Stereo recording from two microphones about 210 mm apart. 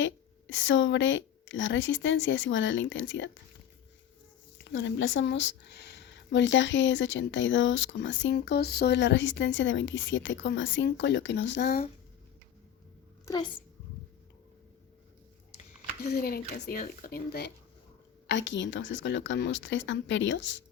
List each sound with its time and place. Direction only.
0.0 s a woman's voice: 65° left (ahead or behind)
4.7 s speech: 60° left (ahead or behind)
13.2 s a child's voice: 20° left (ahead or behind)
16.0 s speech: 45° left (ahead or behind)